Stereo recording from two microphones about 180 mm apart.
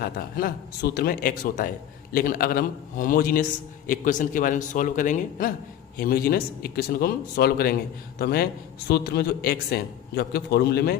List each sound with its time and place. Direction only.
0.0 s a man's voice: 55° left (ahead or behind)
6.0 s a man's voice: 55° left (ahead or behind)